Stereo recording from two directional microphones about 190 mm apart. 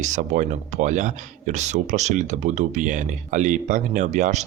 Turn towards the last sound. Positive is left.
turn(degrees=-40)  # may be behind; listen again after turning